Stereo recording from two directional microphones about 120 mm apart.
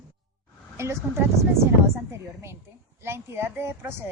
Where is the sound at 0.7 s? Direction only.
20° right (ahead or behind).